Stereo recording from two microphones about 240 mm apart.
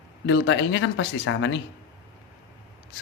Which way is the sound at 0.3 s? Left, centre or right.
Left.